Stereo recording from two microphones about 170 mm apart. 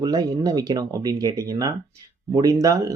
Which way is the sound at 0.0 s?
20° right (ahead or behind).